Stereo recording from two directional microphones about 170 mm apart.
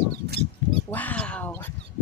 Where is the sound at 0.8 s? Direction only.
10° left (ahead or behind).